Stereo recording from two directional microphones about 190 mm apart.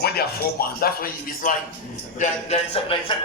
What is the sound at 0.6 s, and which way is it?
Speech, 50° left (ahead or behind).